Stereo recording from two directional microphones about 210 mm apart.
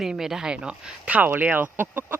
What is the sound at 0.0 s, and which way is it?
Speech, centre (ahead or behind).